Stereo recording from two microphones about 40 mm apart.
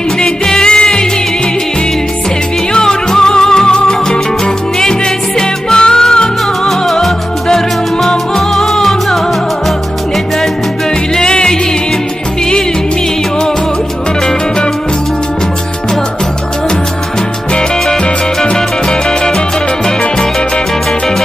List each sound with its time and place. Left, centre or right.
0.2 s music: centre
2.7 s music: centre
6.7 s music: centre
11.1 s music: centre
17.6 s music: left